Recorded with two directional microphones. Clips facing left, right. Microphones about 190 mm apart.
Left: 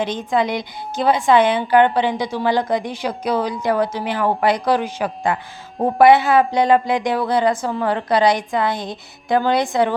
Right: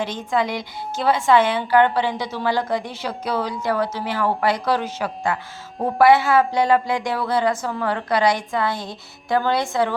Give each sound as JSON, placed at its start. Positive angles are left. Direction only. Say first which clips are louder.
{"t": 0.0, "sound": "a woman's voice", "louder": "left 3 dB", "side_deg": 20}